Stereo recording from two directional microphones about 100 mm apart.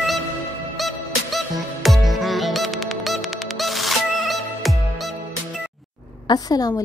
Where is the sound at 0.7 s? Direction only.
Centre (ahead or behind).